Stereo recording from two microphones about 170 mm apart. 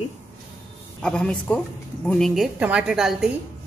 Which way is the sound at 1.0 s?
5° left (ahead or behind).